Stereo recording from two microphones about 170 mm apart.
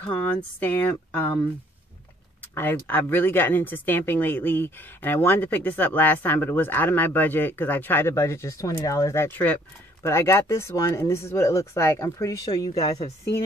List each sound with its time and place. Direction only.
0.1 s speech: 10° left (ahead or behind)
2.5 s speech: 15° left (ahead or behind)